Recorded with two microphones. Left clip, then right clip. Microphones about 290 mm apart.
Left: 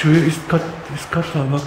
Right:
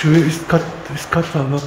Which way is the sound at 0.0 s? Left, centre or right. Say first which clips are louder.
Right 1 dB; centre.